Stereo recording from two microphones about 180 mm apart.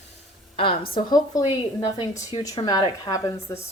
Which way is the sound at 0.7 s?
55° left (ahead or behind).